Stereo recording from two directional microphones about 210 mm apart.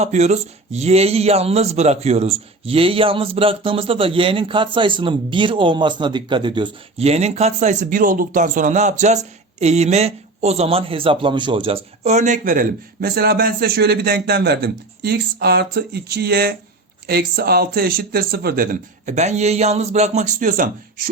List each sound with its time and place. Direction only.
0.0 s speech: 30° right (ahead or behind)